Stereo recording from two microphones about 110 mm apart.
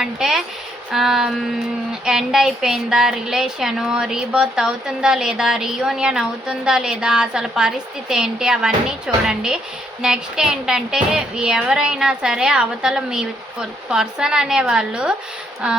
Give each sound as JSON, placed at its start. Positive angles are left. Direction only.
{"t": 0.0, "sound": "a woman's voice", "side_deg": -5}